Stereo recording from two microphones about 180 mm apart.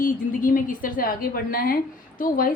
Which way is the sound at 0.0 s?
50° left (ahead or behind).